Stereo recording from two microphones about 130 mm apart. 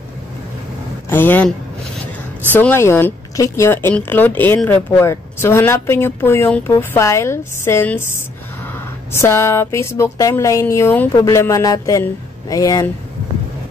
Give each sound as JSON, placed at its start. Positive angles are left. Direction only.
{"t": 1.1, "sound": "speech", "side_deg": 15}
{"t": 2.5, "sound": "speech", "side_deg": 15}